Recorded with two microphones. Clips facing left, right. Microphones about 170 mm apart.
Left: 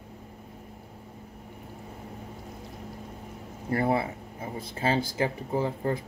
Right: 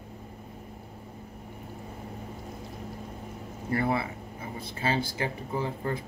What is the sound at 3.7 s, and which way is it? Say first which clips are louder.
Speech: left 2 dB; 40° left (ahead or behind).